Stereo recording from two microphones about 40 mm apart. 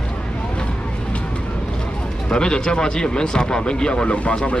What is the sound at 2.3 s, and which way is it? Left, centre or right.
Speech, centre.